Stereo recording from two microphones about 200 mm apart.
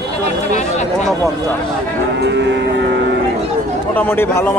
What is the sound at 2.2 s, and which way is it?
Moo, 60° right (ahead or behind).